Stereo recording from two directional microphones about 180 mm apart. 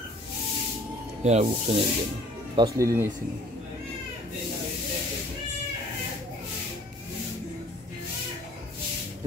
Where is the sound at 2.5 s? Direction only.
20° right (ahead or behind).